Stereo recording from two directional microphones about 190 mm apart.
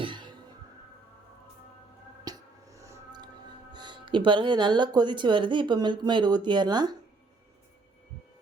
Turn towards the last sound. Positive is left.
turn(degrees=-20)  # may be behind; listen again after turning